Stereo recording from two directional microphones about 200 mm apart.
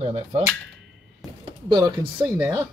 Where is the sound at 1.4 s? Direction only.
20° right (ahead or behind).